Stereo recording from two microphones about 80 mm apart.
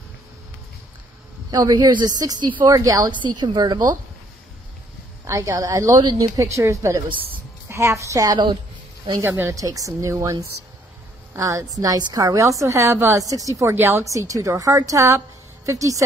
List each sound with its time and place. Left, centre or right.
1.5 s a woman's voice: right
3.2 s a woman's voice: right
5.2 s a woman's voice: right
9.2 s a woman's voice: right
13.7 s a woman's voice: right
14.0 s a woman's voice: right